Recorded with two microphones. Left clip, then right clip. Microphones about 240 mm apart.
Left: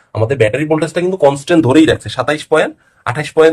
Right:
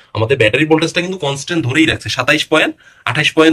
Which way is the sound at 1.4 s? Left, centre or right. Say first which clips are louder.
Left 5 dB; left.